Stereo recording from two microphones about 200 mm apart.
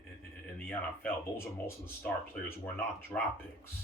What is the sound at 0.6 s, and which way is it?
Speech, 10° left (ahead or behind).